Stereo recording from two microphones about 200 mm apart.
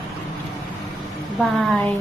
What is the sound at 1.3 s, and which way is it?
Speech, centre (ahead or behind).